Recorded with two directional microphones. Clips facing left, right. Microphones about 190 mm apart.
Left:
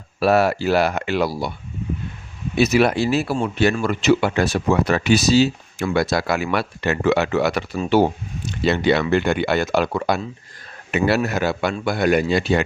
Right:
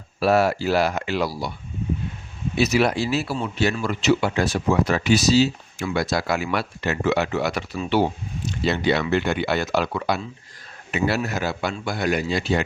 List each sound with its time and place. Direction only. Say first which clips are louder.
0.2 s speech: left 2 dB; 60° left (ahead or behind)
2.6 s speech: left 3 dB; 55° left (ahead or behind)
7.8 s speech: left 4 dB; 45° left (ahead or behind)
8.6 s speech: left 4 dB; 60° left (ahead or behind)
10.9 s speech: left 4 dB; 65° left (ahead or behind)